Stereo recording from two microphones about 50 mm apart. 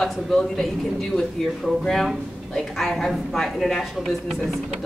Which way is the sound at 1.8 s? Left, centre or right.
Centre.